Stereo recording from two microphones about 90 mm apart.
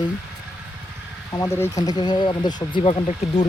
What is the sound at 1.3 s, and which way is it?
Speech, 30° left (ahead or behind).